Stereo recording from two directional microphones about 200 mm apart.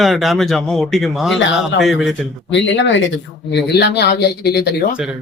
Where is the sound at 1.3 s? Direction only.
65° left (ahead or behind).